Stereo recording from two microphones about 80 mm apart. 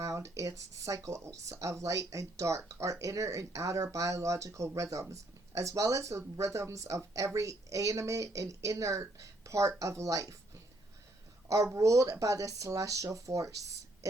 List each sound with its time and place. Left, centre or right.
0.0 s speech: right
11.4 s speech: right